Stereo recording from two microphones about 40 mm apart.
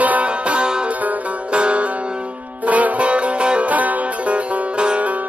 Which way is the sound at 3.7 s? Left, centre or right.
Right.